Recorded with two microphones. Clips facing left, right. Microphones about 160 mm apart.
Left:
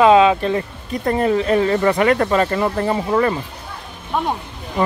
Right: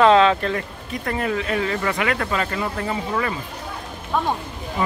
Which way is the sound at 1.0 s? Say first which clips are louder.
Left 7 dB; 35° left (ahead or behind).